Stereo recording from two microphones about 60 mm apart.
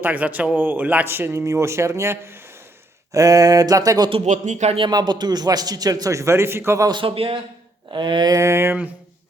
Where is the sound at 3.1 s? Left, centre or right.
Right.